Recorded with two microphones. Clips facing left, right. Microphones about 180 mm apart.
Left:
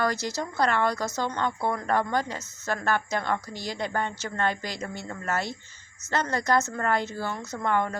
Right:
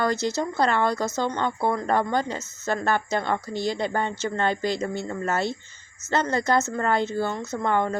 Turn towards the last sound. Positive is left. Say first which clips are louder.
# right 3 dB
turn(degrees=-25)  # may be behind; listen again after turning